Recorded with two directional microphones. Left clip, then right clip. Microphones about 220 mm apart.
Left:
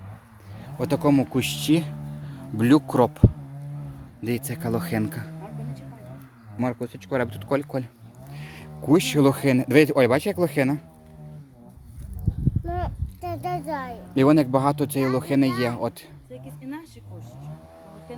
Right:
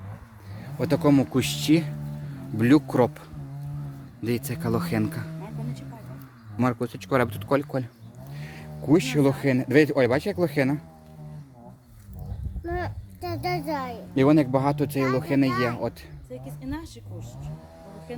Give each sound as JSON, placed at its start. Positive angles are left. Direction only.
{"t": 0.6, "sound": "speech", "side_deg": 10}
{"t": 6.6, "sound": "speech", "side_deg": -15}
{"t": 8.3, "sound": "speech", "side_deg": 15}
{"t": 12.6, "sound": "a sound", "side_deg": -20}
{"t": 14.2, "sound": "speech", "side_deg": 25}
{"t": 16.3, "sound": "a woman's voice", "side_deg": -20}